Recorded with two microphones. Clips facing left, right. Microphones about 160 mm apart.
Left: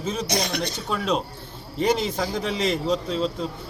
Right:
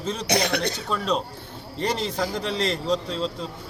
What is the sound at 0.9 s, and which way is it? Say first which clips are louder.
A man's voice: left 3 dB; 5° left (ahead or behind).